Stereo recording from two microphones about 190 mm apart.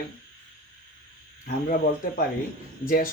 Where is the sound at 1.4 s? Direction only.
50° left (ahead or behind).